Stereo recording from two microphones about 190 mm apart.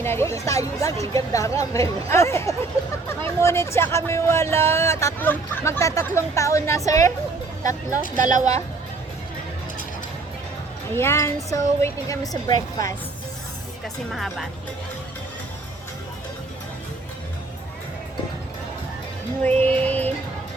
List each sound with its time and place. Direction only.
0.0 s speech: 15° left (ahead or behind)
8.1 s speech: 40° right (ahead or behind)
10.9 s a woman's voice: 15° left (ahead or behind)
13.8 s speech: centre (ahead or behind)
19.4 s speech: 10° left (ahead or behind)